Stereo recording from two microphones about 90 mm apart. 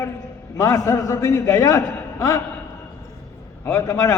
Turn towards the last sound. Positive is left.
turn(degrees=35)  # may be behind; listen again after turning